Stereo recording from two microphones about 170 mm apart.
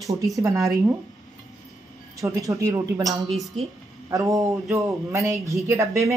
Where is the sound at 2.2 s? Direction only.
20° right (ahead or behind).